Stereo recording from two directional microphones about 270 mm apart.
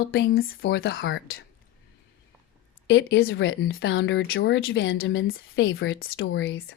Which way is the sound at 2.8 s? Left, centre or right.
Left.